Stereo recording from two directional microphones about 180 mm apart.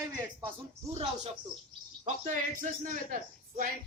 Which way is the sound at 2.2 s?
50° right (ahead or behind).